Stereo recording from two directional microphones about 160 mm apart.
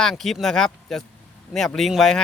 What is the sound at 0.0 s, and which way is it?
Speech, 5° left (ahead or behind).